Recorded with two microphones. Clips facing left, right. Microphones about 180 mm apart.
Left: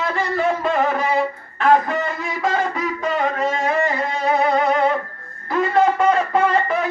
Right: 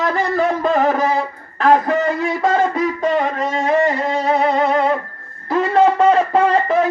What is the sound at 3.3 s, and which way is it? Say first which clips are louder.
Music: right 3 dB; 30° right (ahead or behind).